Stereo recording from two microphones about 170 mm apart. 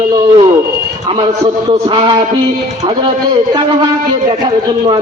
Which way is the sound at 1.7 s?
30° right (ahead or behind).